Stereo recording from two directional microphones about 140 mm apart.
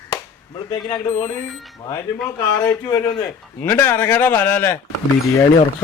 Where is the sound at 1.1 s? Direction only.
20° left (ahead or behind).